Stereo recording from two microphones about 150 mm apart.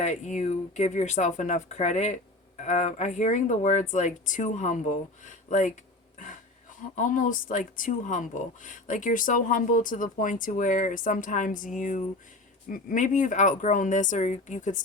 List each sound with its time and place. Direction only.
0.0 s speech: 50° left (ahead or behind)
6.9 s speech: 60° left (ahead or behind)